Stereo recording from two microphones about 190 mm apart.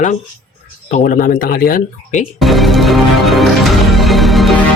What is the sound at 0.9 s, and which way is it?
Speech, 40° left (ahead or behind).